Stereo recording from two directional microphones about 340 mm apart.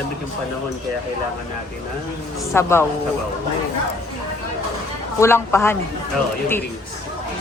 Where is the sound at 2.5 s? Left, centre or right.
Centre.